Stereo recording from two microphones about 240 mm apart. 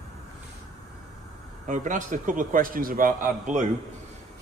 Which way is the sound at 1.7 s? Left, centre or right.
Right.